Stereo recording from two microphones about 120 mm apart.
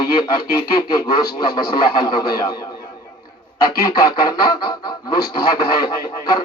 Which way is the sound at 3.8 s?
35° left (ahead or behind).